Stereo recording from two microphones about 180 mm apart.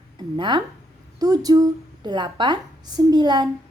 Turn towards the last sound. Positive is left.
turn(degrees=-25)  # may be behind; listen again after turning